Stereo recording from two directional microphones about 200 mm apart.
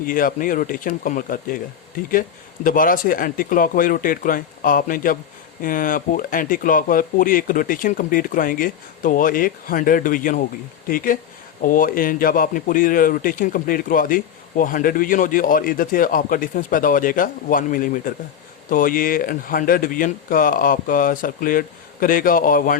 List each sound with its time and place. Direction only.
0.0 s speech: 45° left (ahead or behind)
2.6 s speech: 45° left (ahead or behind)